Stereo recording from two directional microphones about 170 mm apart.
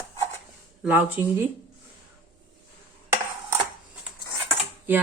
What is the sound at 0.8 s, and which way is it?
Speech, 10° right (ahead or behind).